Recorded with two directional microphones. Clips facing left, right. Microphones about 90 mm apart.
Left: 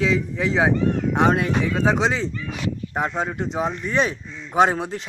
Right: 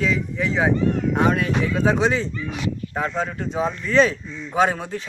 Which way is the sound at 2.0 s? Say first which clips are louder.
Right 1 dB; 20° left (ahead or behind).